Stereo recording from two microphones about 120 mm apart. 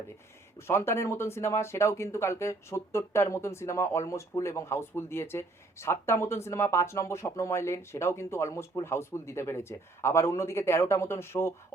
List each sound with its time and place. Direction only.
0.7 s speech: 20° left (ahead or behind)